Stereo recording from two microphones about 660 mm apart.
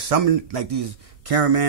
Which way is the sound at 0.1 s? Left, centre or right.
Right.